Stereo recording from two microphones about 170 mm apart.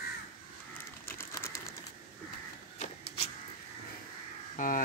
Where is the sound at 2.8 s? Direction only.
45° left (ahead or behind).